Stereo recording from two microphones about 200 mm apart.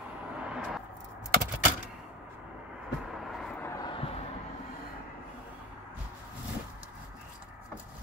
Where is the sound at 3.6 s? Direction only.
15° left (ahead or behind).